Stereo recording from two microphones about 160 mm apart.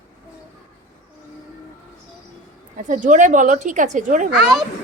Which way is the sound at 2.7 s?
50° right (ahead or behind).